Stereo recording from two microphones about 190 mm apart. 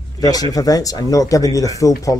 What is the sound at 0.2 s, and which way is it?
Speech, 20° left (ahead or behind).